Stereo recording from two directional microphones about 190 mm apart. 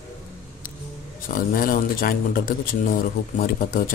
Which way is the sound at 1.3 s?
50° left (ahead or behind).